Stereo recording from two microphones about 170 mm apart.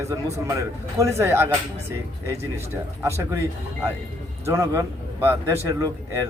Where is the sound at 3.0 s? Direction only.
15° right (ahead or behind).